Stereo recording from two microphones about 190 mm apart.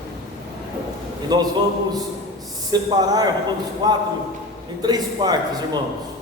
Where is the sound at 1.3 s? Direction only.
20° right (ahead or behind).